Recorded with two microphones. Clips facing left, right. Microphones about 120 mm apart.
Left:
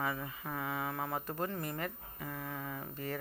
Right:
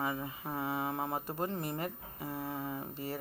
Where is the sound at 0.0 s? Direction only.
20° right (ahead or behind).